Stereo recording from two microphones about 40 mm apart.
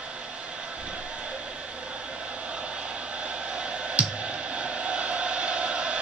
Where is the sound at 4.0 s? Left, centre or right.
Right.